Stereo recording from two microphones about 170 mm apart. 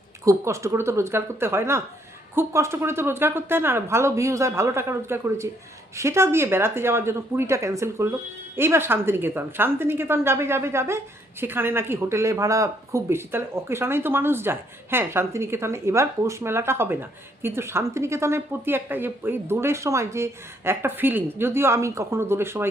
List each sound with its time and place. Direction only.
0.3 s a woman's voice: 15° right (ahead or behind)